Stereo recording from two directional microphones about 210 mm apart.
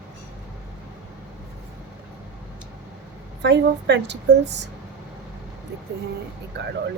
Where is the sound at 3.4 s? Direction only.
55° right (ahead or behind).